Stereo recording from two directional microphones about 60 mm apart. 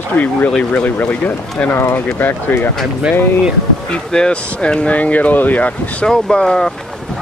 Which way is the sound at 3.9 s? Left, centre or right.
Centre.